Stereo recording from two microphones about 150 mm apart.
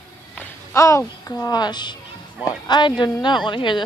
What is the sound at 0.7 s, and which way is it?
A woman's voice, 20° left (ahead or behind).